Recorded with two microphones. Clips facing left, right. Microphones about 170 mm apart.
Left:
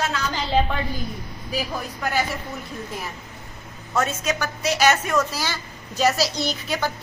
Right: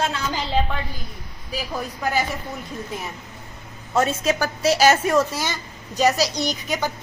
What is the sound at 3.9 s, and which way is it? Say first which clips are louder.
A woman's voice: right 3 dB; 30° right (ahead or behind).